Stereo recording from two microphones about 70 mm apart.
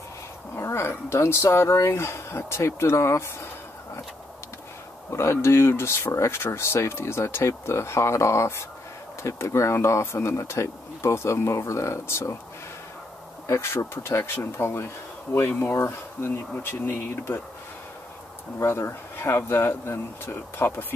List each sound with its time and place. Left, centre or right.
0.6 s speech: left
5.1 s speech: left
13.5 s speech: left
18.6 s speech: left